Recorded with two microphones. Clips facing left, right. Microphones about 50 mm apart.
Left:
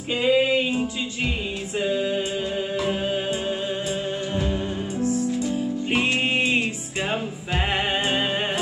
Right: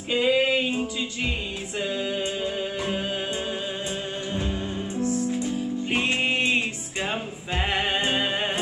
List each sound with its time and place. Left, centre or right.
0.1 s music: centre
4.3 s music: centre